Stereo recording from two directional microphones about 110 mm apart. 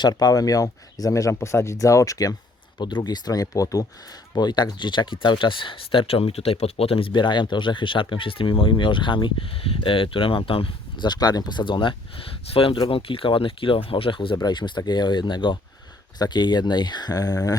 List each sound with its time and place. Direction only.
0.0 s speech: 35° left (ahead or behind)
2.7 s speech: 40° left (ahead or behind)
11.0 s speech: 40° left (ahead or behind)